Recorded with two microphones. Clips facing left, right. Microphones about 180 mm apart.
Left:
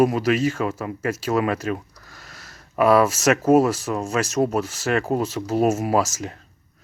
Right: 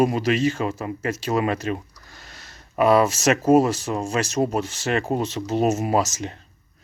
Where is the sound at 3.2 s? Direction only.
25° right (ahead or behind).